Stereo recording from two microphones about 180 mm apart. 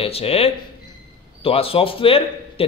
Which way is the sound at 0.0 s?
35° left (ahead or behind).